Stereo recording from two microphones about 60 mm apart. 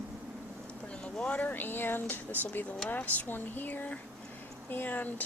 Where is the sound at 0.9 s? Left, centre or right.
Centre.